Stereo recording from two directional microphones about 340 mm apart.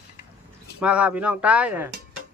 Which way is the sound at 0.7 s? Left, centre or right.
Centre.